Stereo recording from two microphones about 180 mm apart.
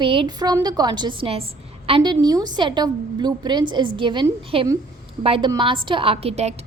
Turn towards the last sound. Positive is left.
turn(degrees=-35)  # may be behind; listen again after turning